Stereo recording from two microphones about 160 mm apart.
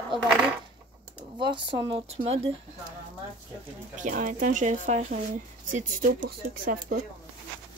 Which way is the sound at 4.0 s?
55° right (ahead or behind).